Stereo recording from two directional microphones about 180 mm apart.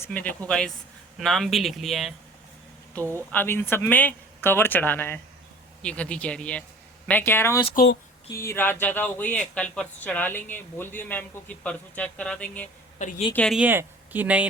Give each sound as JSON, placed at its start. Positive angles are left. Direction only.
{"t": 0.0, "sound": "speech", "side_deg": 10}
{"t": 3.3, "sound": "speech", "side_deg": 10}
{"t": 13.0, "sound": "a woman's voice", "side_deg": 45}
{"t": 13.3, "sound": "speech", "side_deg": 5}
{"t": 13.6, "sound": "speech", "side_deg": -10}